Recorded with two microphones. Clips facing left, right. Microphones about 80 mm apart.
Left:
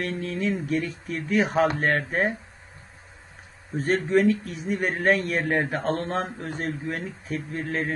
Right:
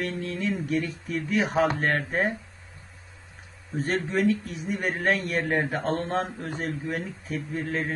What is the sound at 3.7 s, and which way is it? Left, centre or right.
Speech, centre.